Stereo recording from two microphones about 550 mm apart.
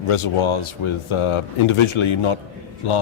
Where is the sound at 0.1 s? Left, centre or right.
Left.